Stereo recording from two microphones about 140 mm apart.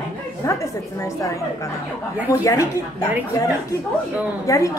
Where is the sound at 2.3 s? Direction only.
20° left (ahead or behind).